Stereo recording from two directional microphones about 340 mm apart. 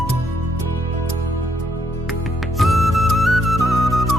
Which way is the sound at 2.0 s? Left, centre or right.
Centre.